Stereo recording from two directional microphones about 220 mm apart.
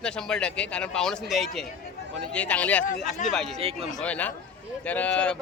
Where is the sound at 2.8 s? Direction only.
35° left (ahead or behind).